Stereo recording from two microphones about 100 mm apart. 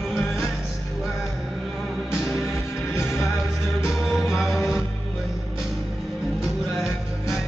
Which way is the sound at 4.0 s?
Centre (ahead or behind).